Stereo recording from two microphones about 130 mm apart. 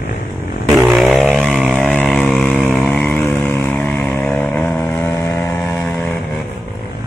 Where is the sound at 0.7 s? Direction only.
Centre (ahead or behind).